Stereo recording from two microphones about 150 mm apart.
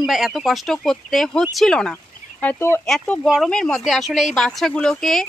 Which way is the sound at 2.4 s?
15° left (ahead or behind).